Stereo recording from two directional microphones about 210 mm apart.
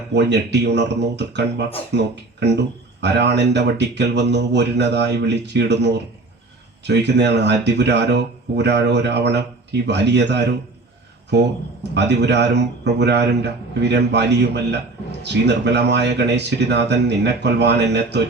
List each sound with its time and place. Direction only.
0.1 s speech: 55° right (ahead or behind)